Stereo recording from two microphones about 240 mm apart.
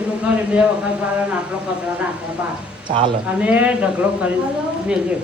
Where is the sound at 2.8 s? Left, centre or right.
Centre.